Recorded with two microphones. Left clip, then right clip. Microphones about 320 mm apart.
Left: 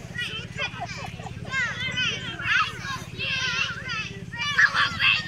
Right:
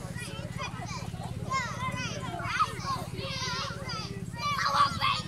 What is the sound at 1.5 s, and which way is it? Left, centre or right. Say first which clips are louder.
Children playing: left 5 dB; centre.